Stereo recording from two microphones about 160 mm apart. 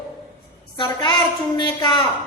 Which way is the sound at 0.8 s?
30° left (ahead or behind).